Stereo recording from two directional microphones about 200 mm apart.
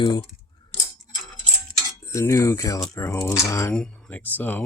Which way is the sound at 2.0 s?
15° left (ahead or behind).